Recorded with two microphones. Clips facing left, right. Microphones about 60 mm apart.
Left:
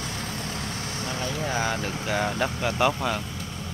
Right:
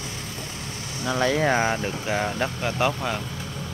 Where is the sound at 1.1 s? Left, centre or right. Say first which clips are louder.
Right 10 dB; right.